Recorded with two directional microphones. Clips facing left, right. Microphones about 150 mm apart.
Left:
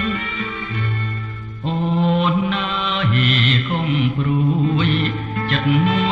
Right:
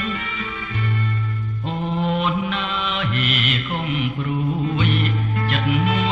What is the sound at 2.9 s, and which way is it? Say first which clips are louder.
Mantra: left 7 dB; 5° right (ahead or behind).